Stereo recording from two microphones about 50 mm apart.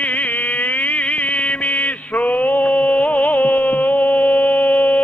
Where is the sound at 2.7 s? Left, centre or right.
Left.